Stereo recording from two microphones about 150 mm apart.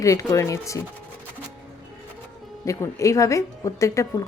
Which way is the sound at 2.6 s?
20° left (ahead or behind).